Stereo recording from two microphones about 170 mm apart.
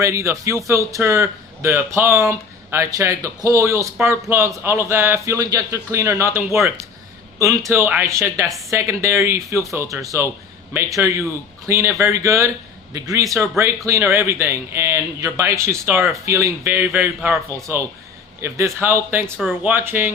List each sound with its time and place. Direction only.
0.0 s a man's voice: 15° right (ahead or behind)
18.4 s a man's voice: 15° right (ahead or behind)
19.4 s speech: centre (ahead or behind)
19.7 s a man's voice: 10° right (ahead or behind)